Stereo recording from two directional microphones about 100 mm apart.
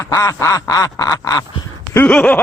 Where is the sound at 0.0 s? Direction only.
30° left (ahead or behind).